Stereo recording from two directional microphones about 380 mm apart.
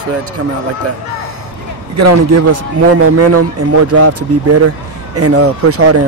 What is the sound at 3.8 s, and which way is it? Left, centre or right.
Speech, right.